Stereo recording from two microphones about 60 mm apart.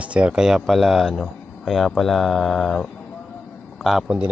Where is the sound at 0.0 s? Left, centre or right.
Right; by 2.8 s centre.